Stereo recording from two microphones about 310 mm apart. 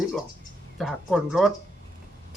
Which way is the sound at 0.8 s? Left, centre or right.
Centre.